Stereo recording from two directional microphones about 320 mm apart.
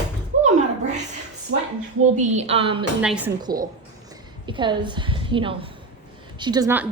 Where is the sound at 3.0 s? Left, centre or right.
Centre.